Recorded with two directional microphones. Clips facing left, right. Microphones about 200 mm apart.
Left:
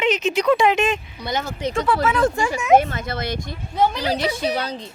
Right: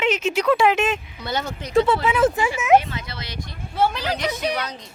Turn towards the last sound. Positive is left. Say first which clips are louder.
# left 3 dB
turn(degrees=30)  # may be behind; listen again after turning